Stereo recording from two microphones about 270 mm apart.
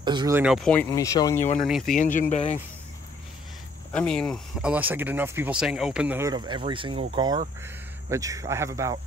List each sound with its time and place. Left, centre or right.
0.0 s speech: centre
2.0 s speech: left
3.9 s speech: centre